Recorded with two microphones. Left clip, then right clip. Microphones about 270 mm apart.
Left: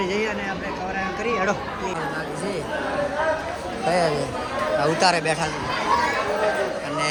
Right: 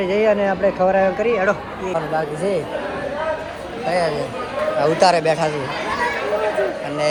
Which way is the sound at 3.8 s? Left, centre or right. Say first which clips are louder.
Right 2 dB; centre.